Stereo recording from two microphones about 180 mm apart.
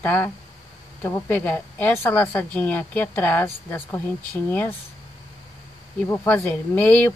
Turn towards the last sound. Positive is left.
turn(degrees=10)  # may be behind; listen again after turning